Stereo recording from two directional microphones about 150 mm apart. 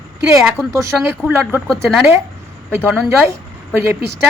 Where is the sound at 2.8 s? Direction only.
10° right (ahead or behind).